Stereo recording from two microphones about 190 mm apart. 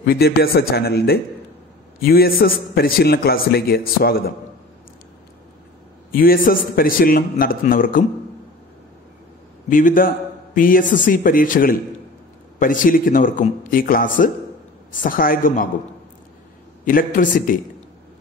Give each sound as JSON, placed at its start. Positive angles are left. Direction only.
{"t": 0.0, "sound": "a man's voice", "side_deg": 55}
{"t": 6.1, "sound": "a man's voice", "side_deg": 50}
{"t": 9.7, "sound": "a man's voice", "side_deg": 45}
{"t": 16.8, "sound": "a man's voice", "side_deg": 45}